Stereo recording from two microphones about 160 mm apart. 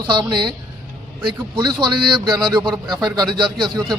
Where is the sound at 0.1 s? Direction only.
30° right (ahead or behind).